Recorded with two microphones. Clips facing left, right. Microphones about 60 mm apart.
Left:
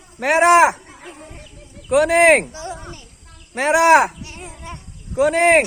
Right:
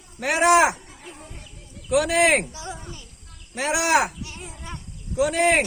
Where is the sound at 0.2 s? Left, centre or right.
Left.